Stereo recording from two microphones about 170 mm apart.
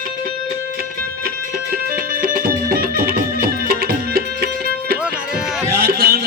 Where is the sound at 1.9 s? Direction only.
55° right (ahead or behind).